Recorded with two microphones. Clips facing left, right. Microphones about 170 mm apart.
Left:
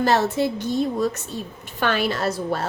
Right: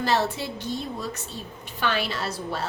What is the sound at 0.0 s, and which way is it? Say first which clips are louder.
Speech: left 5 dB; 45° left (ahead or behind).